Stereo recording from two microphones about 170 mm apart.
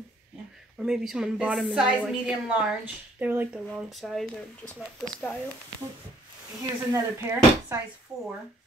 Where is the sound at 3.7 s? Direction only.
Centre (ahead or behind).